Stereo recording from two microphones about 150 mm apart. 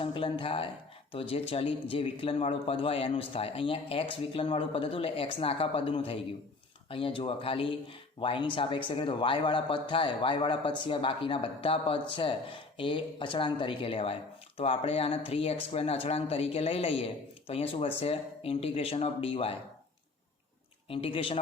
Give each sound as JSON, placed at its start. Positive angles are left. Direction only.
{"t": 0.0, "sound": "speech", "side_deg": 35}
{"t": 20.9, "sound": "speech", "side_deg": 40}